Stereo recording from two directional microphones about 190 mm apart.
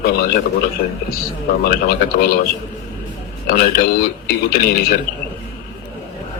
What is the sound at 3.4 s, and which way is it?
Speech, 55° left (ahead or behind).